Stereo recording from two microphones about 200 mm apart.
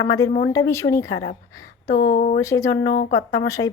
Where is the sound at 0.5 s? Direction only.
15° left (ahead or behind).